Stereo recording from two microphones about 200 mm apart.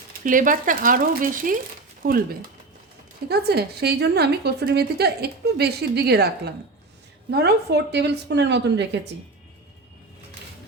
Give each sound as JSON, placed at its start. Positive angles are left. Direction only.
{"t": 0.3, "sound": "a woman's voice", "side_deg": -40}
{"t": 3.2, "sound": "a woman's voice", "side_deg": -55}